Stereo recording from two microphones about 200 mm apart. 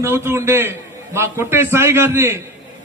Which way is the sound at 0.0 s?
10° right (ahead or behind).